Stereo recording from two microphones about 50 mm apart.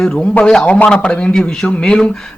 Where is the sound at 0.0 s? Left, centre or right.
Centre.